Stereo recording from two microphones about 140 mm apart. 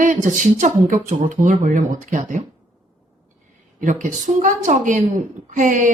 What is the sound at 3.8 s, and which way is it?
Speech, 65° right (ahead or behind).